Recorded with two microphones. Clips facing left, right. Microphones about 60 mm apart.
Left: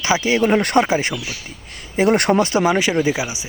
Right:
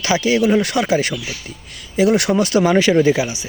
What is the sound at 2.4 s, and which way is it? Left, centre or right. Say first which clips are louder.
Speech: right 2 dB; left.